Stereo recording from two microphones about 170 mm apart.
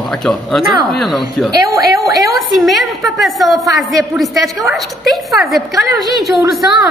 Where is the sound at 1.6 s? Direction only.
20° right (ahead or behind).